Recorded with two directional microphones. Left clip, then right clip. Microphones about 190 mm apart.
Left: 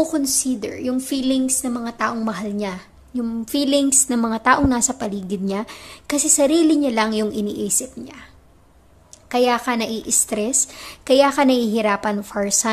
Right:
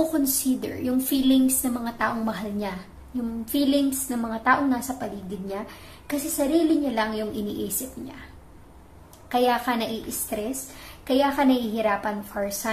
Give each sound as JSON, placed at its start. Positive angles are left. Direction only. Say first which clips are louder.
{"t": 0.1, "sound": "a woman's voice", "louder": "left 3 dB", "side_deg": 30}
{"t": 9.3, "sound": "a woman's voice", "louder": "left 4 dB", "side_deg": 35}